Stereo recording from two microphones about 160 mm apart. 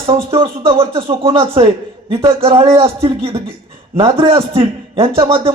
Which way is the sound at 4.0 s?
35° right (ahead or behind).